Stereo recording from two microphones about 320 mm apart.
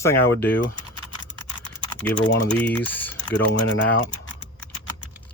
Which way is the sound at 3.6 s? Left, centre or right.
Left.